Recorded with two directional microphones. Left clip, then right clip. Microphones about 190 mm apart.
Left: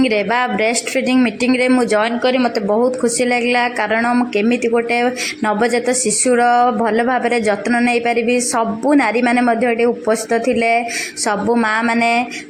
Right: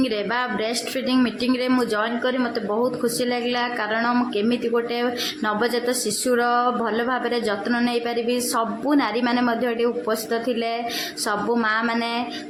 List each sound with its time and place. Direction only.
0.0 s speech: 25° left (ahead or behind)